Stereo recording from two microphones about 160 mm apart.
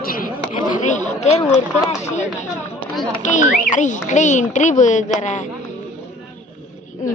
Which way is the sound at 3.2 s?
50° left (ahead or behind).